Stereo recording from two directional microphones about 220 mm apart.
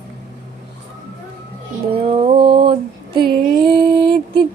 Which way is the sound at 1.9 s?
25° right (ahead or behind).